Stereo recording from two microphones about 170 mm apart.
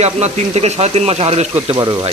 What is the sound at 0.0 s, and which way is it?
Speech, 40° right (ahead or behind).